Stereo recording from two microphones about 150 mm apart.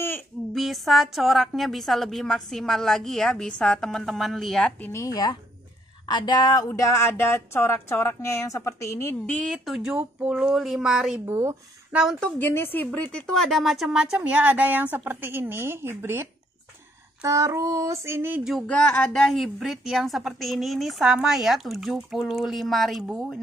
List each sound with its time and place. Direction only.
0.6 s a woman's voice: centre (ahead or behind)
11.2 s speech: 15° right (ahead or behind)
12.4 s speech: 15° left (ahead or behind)
13.1 s speech: 5° left (ahead or behind); by 16.3 s 15° right (ahead or behind)
17.2 s child singing: 20° right (ahead or behind)
18.4 s a woman's voice: centre (ahead or behind)